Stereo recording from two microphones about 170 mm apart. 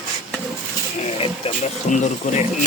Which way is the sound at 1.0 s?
35° left (ahead or behind).